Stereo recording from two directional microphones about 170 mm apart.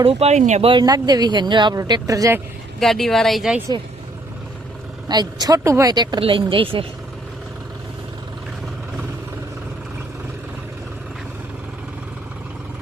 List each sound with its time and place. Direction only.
0.0 s speech: 35° right (ahead or behind)
0.7 s speech: 25° right (ahead or behind)
2.8 s speech: centre (ahead or behind)
5.0 s speech: 25° right (ahead or behind)